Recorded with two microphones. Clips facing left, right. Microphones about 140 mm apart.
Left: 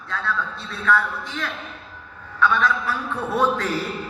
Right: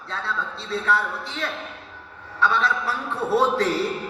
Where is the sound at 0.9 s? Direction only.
30° right (ahead or behind).